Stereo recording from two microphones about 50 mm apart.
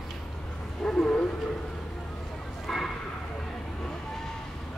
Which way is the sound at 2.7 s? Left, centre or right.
Centre.